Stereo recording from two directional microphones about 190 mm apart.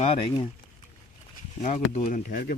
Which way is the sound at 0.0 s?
30° left (ahead or behind).